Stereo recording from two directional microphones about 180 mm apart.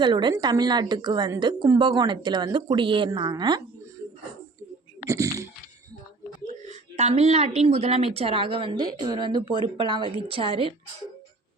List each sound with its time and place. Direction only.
0.0 s a woman's voice: 25° right (ahead or behind)
5.0 s a sound: 15° right (ahead or behind)
6.5 s a woman's voice: 40° right (ahead or behind)